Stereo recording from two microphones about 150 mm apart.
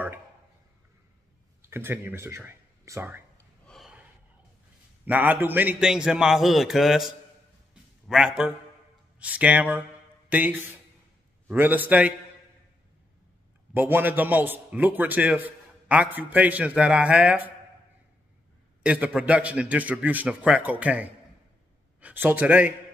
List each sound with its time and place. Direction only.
1.6 s speech: 15° right (ahead or behind)
3.6 s gasp: centre (ahead or behind)
5.0 s a man's voice: 10° right (ahead or behind)
13.7 s a man's voice: 15° right (ahead or behind)
18.8 s a man's voice: 10° right (ahead or behind)